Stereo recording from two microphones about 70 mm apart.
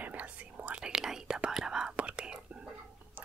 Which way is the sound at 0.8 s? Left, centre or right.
Centre.